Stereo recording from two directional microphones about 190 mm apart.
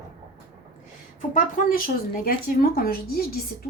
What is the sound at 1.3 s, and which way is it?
Speech, 45° left (ahead or behind).